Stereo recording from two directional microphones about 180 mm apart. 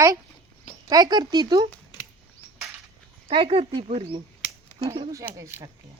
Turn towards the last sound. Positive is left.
turn(degrees=-15)  # may be behind; listen again after turning